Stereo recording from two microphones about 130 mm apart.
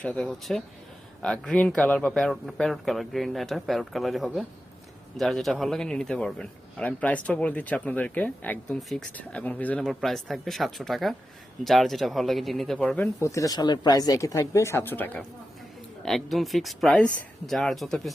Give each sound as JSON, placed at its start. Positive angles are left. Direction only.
{"t": 0.0, "sound": "a man's voice", "side_deg": 5}
{"t": 13.1, "sound": "speech", "side_deg": 25}
{"t": 16.0, "sound": "speech", "side_deg": 0}